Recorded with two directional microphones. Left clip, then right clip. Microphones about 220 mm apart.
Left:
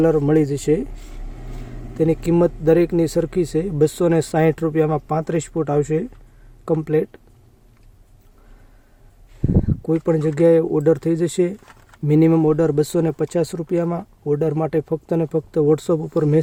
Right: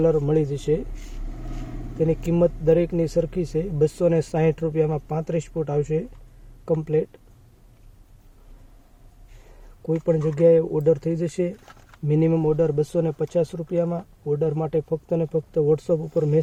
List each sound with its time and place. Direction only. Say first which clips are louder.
0.0 s speech: left 4 dB; 45° left (ahead or behind)
2.0 s speech: left 4 dB; 40° left (ahead or behind)
9.8 s speech: left 2 dB; 40° left (ahead or behind)